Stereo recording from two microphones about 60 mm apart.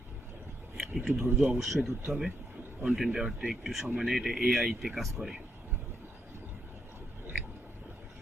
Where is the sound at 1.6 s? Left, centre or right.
Centre.